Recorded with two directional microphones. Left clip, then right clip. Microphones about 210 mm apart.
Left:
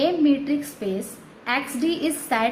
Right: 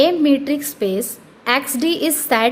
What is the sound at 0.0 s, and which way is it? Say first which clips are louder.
A woman's voice: right 6 dB; 50° right (ahead or behind).